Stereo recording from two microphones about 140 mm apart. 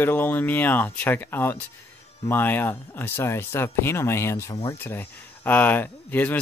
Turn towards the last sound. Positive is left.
turn(degrees=10)  # may be behind; listen again after turning